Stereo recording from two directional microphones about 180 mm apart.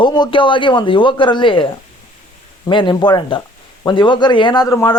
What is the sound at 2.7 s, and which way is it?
A man's voice, 25° left (ahead or behind).